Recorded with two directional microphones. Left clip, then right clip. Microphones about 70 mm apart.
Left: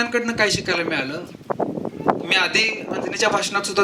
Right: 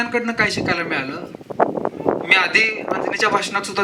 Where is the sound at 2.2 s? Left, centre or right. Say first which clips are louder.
Right 5 dB; left.